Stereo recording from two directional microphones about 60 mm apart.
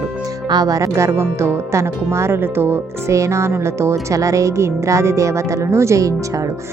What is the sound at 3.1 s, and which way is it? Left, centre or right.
Speech, right.